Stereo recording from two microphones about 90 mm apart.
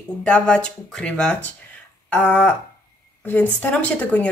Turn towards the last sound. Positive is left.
turn(degrees=15)  # may be behind; listen again after turning